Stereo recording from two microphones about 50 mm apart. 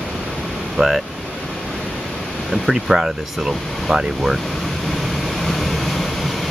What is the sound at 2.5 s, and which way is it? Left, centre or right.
Speech, centre.